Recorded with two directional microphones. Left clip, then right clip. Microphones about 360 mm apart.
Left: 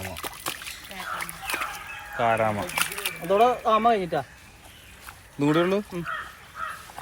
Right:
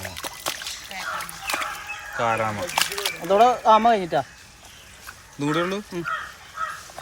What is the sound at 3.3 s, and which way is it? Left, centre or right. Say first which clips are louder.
Speech: right 4 dB; right.